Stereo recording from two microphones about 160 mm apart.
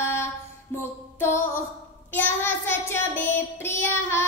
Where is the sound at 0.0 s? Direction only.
15° left (ahead or behind).